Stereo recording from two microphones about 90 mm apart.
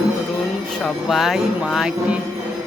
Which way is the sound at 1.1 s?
Centre (ahead or behind).